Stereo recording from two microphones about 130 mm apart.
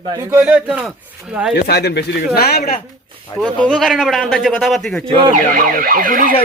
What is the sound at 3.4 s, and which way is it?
A man's voice, 5° left (ahead or behind).